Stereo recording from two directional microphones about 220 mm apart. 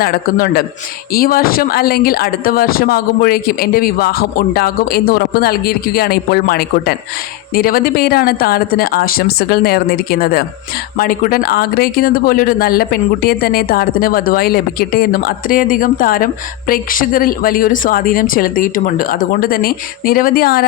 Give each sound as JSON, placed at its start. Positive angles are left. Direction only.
{"t": 0.0, "sound": "speech", "side_deg": 40}